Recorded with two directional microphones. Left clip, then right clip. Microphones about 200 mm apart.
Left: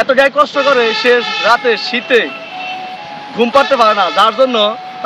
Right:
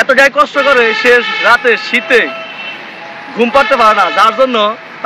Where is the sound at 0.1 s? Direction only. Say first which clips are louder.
Right 2 dB; 10° left (ahead or behind).